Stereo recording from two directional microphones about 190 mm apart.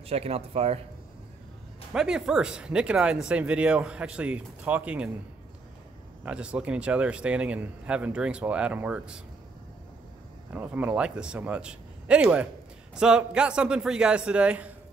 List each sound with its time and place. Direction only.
0.0 s a man's voice: 30° right (ahead or behind)
2.0 s a man's voice: 5° right (ahead or behind)
6.2 s speech: 5° right (ahead or behind)
10.5 s a man's voice: 10° right (ahead or behind)